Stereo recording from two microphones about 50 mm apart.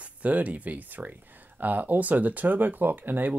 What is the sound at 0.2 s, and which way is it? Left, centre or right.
Speech, right.